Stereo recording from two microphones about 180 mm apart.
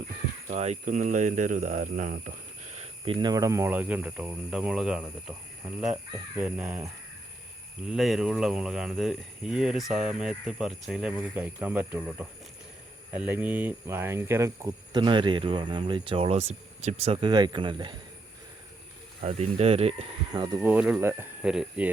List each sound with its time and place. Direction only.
0.4 s speech: 40° right (ahead or behind); by 5.3 s 5° right (ahead or behind)
6.3 s speech: 5° right (ahead or behind)
7.9 s speech: centre (ahead or behind); by 17.9 s 25° right (ahead or behind)
19.2 s speech: 35° right (ahead or behind)
20.6 s speech: 5° right (ahead or behind)